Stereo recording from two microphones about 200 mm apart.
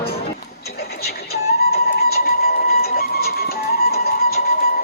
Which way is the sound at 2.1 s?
50° left (ahead or behind).